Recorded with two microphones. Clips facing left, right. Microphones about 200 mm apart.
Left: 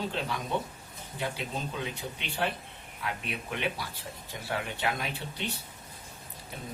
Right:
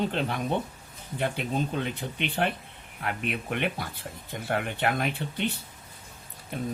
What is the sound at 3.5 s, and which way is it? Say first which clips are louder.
Speech: right 1 dB; 55° right (ahead or behind).